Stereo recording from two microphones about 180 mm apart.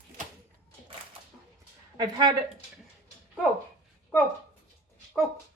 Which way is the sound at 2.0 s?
20° right (ahead or behind).